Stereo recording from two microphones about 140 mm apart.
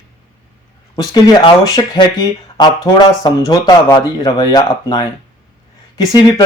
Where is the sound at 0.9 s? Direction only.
30° left (ahead or behind).